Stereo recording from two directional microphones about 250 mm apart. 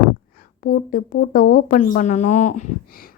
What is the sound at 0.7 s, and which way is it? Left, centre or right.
A woman's voice, left.